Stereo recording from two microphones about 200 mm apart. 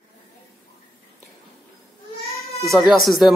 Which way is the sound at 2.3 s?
30° left (ahead or behind).